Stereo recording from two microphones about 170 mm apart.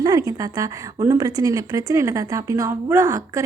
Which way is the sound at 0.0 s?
20° right (ahead or behind).